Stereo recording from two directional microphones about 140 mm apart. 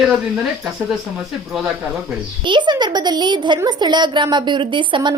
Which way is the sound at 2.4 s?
35° right (ahead or behind).